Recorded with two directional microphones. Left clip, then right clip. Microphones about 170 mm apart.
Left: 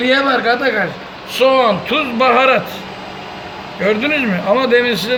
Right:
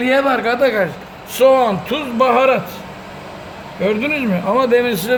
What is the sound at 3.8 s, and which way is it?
Speech, 25° right (ahead or behind).